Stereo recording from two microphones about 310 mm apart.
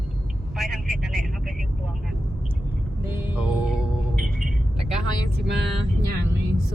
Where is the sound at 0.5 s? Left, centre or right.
Centre.